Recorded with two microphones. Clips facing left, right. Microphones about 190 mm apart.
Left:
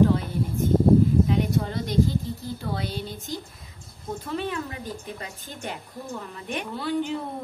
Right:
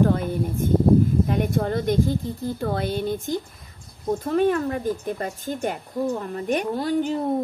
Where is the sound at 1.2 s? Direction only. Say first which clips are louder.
Right 2 dB; 50° right (ahead or behind).